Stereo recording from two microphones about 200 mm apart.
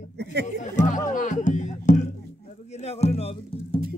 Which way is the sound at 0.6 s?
40° left (ahead or behind).